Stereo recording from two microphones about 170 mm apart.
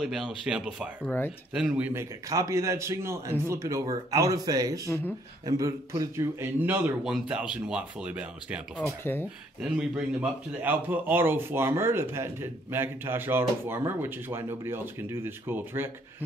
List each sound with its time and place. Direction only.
0.0 s speech: centre (ahead or behind)
1.0 s speech: 10° left (ahead or behind)
1.5 s a man's voice: 5° right (ahead or behind); by 4.8 s 20° right (ahead or behind)
4.8 s speech: 15° left (ahead or behind)
5.4 s a man's voice: 20° right (ahead or behind)
9.0 s speech: 10° left (ahead or behind)
9.6 s a man's voice: 5° right (ahead or behind)